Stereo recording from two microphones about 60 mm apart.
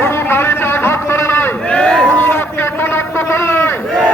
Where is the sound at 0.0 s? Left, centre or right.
Left.